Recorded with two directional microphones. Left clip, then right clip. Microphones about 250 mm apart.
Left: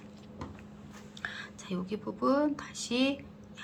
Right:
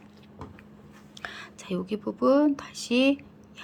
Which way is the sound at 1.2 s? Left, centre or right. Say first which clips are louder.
Right 3 dB; right.